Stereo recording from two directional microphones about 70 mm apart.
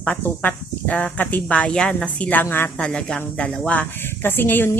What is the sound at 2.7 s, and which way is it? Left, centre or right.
Speech, centre.